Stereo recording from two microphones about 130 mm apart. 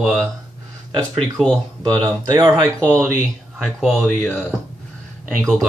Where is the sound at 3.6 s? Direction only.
Centre (ahead or behind).